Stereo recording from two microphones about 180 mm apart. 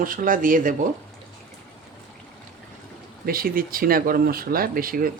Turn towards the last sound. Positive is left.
turn(degrees=-50)  # may be behind; listen again after turning